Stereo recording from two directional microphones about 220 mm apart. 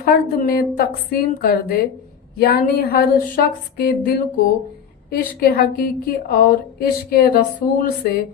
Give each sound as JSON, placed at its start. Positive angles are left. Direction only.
{"t": 0.0, "sound": "a woman's voice", "side_deg": 40}